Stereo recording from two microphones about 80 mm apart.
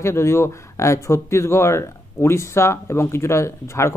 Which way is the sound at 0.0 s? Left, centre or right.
Left.